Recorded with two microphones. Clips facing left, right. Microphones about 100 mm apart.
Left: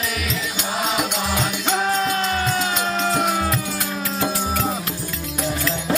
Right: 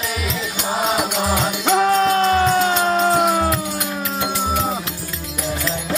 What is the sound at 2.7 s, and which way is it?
Music, 35° right (ahead or behind).